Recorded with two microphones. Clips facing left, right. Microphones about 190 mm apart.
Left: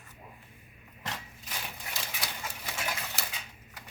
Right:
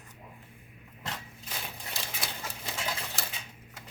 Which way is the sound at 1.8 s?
25° right (ahead or behind).